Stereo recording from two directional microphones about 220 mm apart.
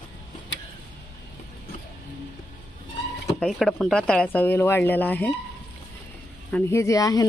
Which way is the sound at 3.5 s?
Centre (ahead or behind).